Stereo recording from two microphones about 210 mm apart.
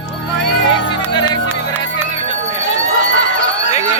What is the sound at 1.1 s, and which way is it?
Music, 20° left (ahead or behind).